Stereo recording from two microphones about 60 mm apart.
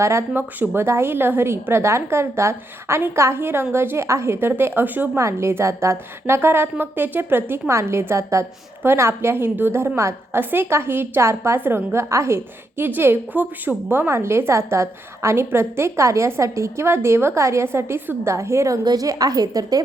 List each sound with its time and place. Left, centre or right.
0.0 s a woman's voice: right
0.3 s a woman's voice: right
5.1 s a woman's voice: right
7.7 s a woman's voice: right
10.3 s a woman's voice: right
12.0 s a woman's voice: right
12.7 s a woman's voice: right
14.1 s a woman's voice: right